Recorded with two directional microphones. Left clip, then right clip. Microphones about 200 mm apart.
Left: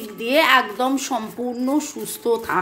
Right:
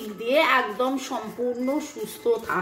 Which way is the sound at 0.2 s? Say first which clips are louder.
Left 4 dB; 50° left (ahead or behind).